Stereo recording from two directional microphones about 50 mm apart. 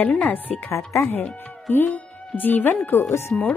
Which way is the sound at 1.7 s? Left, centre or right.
Left.